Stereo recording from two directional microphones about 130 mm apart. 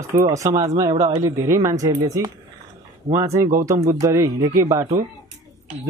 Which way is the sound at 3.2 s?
20° right (ahead or behind).